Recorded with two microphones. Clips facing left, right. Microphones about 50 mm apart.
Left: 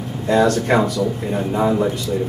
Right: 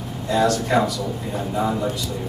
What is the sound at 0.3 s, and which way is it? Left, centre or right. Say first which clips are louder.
Speech: left 4 dB; left.